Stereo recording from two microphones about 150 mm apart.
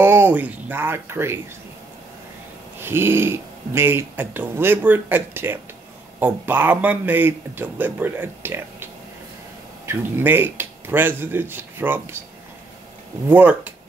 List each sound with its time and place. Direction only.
0.0 s speech: 15° right (ahead or behind)
2.8 s speech: 15° right (ahead or behind)
9.8 s speech: 15° right (ahead or behind)
13.3 s speech: 10° right (ahead or behind)